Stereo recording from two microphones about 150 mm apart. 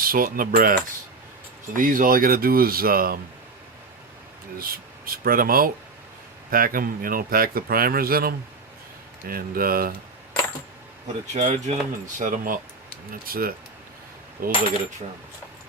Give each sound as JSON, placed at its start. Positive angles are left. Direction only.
{"t": 0.0, "sound": "speech", "side_deg": -70}
{"t": 4.7, "sound": "speech", "side_deg": -75}
{"t": 11.3, "sound": "speech", "side_deg": -55}
{"t": 13.1, "sound": "speech", "side_deg": -75}